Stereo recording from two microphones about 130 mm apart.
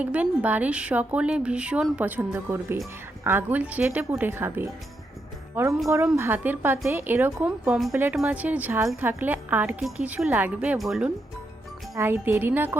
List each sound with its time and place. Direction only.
0.0 s speech: 10° right (ahead or behind)
11.9 s speech: 20° right (ahead or behind)